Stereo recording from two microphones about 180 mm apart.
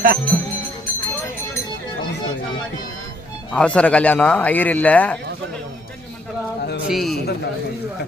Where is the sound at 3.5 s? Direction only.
5° left (ahead or behind).